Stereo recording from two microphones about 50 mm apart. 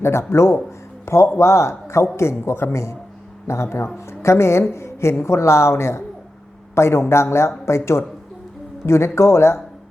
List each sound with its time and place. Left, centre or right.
0.0 s a woman's voice: left
8.9 s a woman's voice: left